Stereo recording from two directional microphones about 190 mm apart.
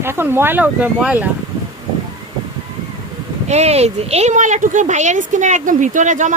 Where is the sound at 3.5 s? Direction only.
35° right (ahead or behind).